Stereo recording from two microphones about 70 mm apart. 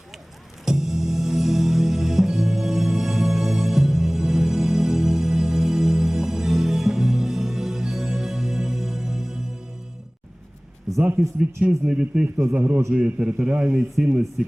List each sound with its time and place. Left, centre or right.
0.6 s music: centre
11.9 s a man's voice: centre
12.5 s a man's voice: right
13.9 s a man's voice: centre